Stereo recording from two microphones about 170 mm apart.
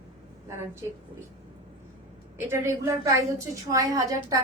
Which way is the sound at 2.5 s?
15° right (ahead or behind).